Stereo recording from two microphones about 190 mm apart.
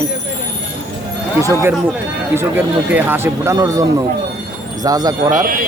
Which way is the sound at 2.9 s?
10° right (ahead or behind).